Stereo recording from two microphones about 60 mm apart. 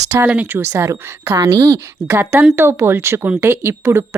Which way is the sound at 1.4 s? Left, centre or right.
Right.